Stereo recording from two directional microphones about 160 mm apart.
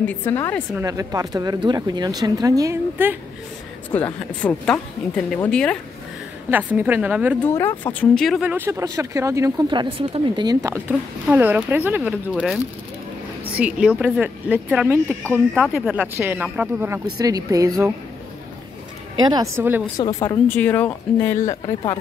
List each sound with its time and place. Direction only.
0.0 s speech: 10° left (ahead or behind)
0.7 s speech: 20° right (ahead or behind)
4.4 s speech: 5° left (ahead or behind)
6.5 s speech: 10° right (ahead or behind)
7.4 s speech: 15° left (ahead or behind)
8.4 s speech: 10° right (ahead or behind)
15.6 s speech: centre (ahead or behind)
17.2 s speech: 20° right (ahead or behind)
19.2 s speech: 20° right (ahead or behind)
20.0 s speech: 20° left (ahead or behind)